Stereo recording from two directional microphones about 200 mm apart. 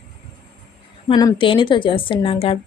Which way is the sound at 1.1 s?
20° left (ahead or behind).